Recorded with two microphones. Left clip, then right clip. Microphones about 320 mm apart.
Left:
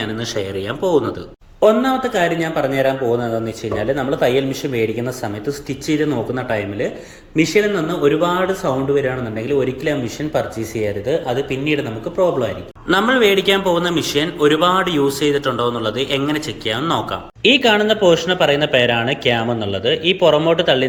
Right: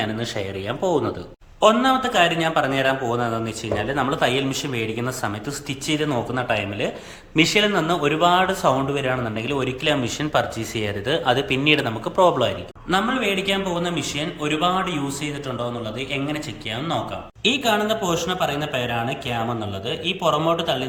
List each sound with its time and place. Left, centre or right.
0.0 s a man's voice: centre
11.5 s speech: right
12.9 s a man's voice: centre